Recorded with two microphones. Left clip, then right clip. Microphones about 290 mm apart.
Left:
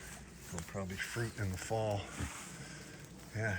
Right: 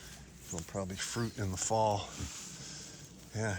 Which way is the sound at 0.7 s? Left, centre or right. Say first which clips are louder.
Right 2 dB; centre.